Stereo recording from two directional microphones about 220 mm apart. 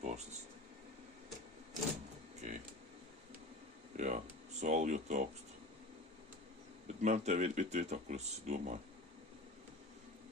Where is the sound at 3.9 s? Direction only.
35° right (ahead or behind).